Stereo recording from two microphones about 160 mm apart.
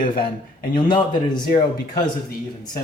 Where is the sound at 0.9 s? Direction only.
30° left (ahead or behind).